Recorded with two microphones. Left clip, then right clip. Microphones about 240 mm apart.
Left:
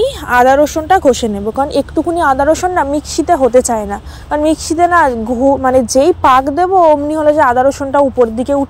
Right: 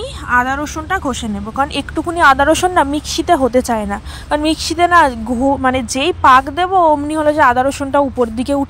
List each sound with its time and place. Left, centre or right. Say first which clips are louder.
0.0 s speech: left 6 dB; centre
2.0 s a woman's voice: right 2 dB; right
3.3 s a woman's voice: left 3 dB; right